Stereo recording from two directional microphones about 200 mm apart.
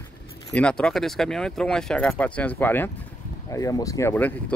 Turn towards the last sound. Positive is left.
turn(degrees=10)  # may be behind; listen again after turning